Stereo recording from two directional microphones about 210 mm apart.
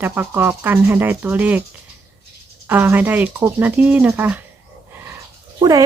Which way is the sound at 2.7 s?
10° right (ahead or behind).